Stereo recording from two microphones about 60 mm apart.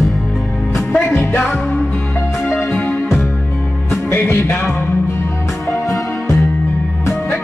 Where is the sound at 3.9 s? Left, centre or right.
Left.